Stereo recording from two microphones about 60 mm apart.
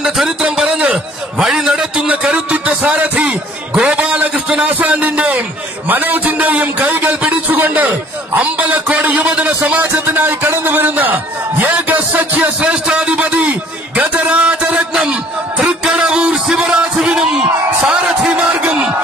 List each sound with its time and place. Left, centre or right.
0.4 s a man's voice: centre
2.0 s a man's voice: centre
9.8 s a man's voice: right
15.6 s music: centre